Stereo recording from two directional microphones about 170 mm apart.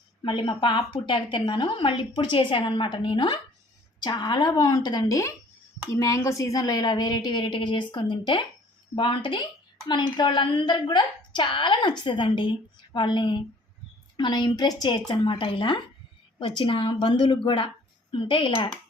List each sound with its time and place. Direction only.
0.2 s a woman's voice: 30° left (ahead or behind)